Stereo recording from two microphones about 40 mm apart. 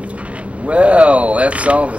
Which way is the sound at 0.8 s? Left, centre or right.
Right.